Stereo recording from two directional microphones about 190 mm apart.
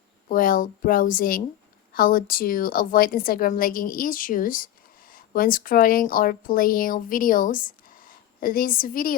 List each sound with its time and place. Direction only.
0.3 s a woman's voice: 45° left (ahead or behind)